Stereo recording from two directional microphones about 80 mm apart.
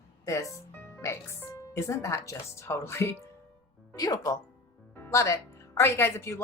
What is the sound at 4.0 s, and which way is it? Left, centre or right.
Speech, left.